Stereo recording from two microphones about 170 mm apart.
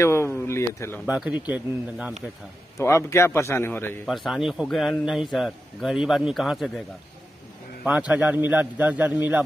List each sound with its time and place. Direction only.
0.0 s speech: 15° left (ahead or behind)
1.0 s a man's voice: 10° right (ahead or behind)
2.8 s a man's voice: 15° left (ahead or behind)
4.1 s a man's voice: centre (ahead or behind)
8.1 s a man's voice: 10° right (ahead or behind)